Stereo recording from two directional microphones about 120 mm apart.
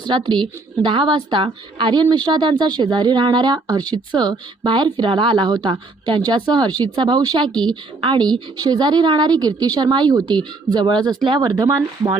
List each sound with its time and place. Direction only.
0.0 s a woman's voice: 40° right (ahead or behind)